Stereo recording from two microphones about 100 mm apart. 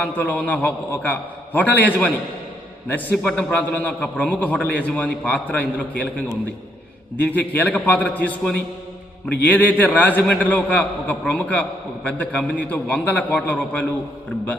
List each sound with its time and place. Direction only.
0.0 s a man's voice: 15° left (ahead or behind)
3.2 s a man's voice: 15° left (ahead or behind)